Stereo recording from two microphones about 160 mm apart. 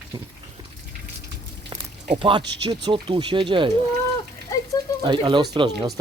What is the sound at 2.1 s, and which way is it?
Speech, 30° right (ahead or behind).